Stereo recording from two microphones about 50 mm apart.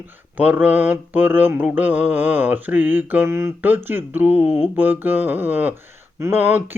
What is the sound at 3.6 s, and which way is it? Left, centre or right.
Speech, right.